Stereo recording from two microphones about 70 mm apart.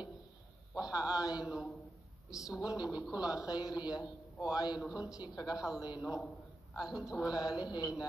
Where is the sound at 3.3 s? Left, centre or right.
Left.